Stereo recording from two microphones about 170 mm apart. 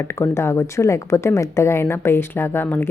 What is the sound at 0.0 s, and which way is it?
A woman's voice, 15° left (ahead or behind).